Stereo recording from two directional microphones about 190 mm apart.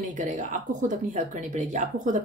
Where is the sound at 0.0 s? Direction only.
40° right (ahead or behind).